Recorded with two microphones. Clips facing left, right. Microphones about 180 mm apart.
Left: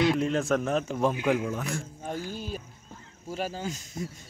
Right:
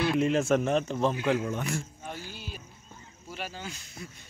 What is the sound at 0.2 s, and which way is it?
A man's voice, centre (ahead or behind).